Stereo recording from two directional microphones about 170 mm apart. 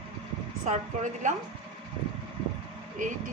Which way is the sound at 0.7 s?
45° right (ahead or behind).